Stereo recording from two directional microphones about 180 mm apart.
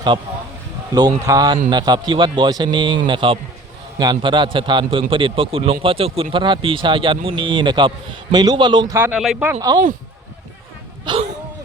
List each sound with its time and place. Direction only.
0.9 s a man's voice: 20° right (ahead or behind)
9.0 s speech: 5° right (ahead or behind)
11.1 s a man's voice: 25° right (ahead or behind)